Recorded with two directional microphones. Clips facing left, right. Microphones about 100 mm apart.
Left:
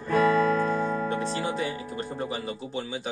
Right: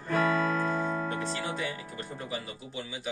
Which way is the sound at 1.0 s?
25° left (ahead or behind).